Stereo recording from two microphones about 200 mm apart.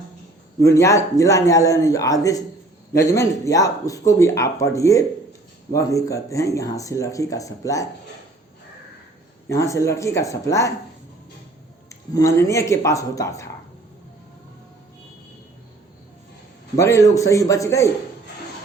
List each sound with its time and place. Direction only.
0.6 s speech: 15° left (ahead or behind)
9.5 s speech: 15° left (ahead or behind)
11.9 s speech: 15° left (ahead or behind)
16.7 s speech: 15° left (ahead or behind)